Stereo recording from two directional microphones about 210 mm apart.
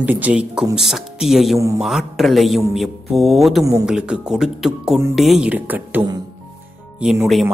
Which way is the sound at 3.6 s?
15° right (ahead or behind).